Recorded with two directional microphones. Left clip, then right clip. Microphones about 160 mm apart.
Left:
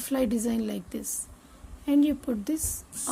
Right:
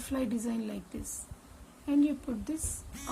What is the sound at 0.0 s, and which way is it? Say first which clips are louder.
A woman's voice: left 7 dB; 45° left (ahead or behind).